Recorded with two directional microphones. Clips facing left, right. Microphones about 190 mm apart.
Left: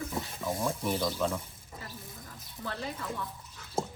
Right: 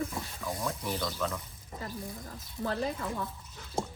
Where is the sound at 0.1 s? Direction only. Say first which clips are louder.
Left 3 dB; 25° left (ahead or behind).